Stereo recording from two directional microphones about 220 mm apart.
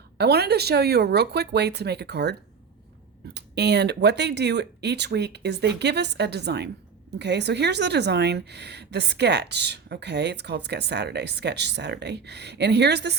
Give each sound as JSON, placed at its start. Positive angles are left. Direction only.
{"t": 0.2, "sound": "a woman's voice", "side_deg": -45}
{"t": 3.3, "sound": "a woman's voice", "side_deg": -50}